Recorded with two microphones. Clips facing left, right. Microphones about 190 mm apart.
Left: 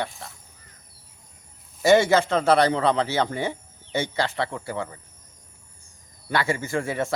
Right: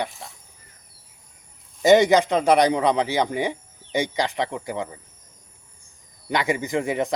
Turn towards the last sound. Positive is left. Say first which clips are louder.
# right 3 dB
turn(degrees=-15)  # may be behind; listen again after turning